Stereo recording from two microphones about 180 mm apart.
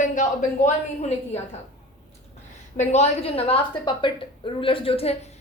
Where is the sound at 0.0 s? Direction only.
45° left (ahead or behind).